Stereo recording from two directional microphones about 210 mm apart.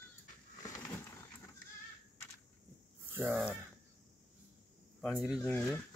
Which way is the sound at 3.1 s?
5° right (ahead or behind).